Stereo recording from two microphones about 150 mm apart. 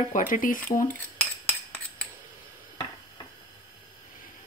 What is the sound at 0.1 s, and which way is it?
Speech, 60° left (ahead or behind).